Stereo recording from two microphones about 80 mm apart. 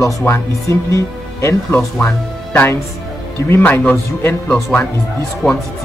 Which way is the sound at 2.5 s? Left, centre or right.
Left.